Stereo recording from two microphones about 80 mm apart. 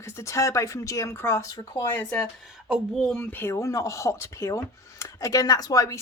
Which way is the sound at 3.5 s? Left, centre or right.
Left.